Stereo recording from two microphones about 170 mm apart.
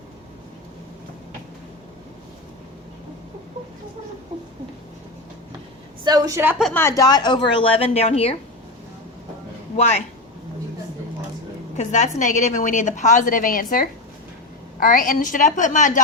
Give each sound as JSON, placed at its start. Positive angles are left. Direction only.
{"t": 6.1, "sound": "a woman's voice", "side_deg": -20}
{"t": 6.7, "sound": "speech", "side_deg": 15}
{"t": 11.8, "sound": "a woman's voice", "side_deg": 45}